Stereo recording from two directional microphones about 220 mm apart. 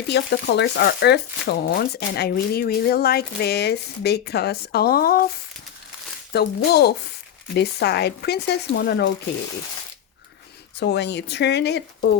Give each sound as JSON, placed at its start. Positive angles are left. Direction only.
{"t": 0.1, "sound": "speech", "side_deg": 50}
{"t": 6.3, "sound": "speech", "side_deg": 45}
{"t": 10.8, "sound": "speech", "side_deg": 50}